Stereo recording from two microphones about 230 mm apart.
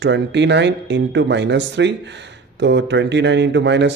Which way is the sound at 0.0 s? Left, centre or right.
Right.